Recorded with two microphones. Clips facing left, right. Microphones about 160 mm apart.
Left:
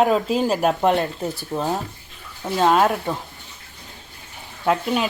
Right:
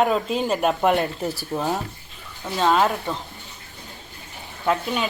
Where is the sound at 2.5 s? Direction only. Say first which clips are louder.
Left 2 dB; 15° left (ahead or behind).